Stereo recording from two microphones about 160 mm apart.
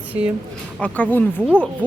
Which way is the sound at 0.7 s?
10° left (ahead or behind).